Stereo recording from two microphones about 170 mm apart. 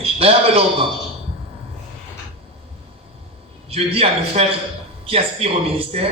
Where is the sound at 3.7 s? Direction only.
35° right (ahead or behind).